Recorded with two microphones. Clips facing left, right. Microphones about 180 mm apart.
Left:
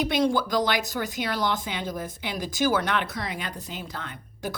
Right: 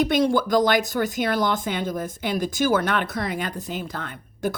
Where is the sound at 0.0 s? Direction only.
50° right (ahead or behind).